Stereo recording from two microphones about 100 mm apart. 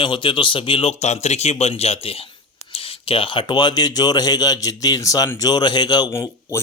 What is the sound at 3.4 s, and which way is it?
A man's voice, 45° left (ahead or behind).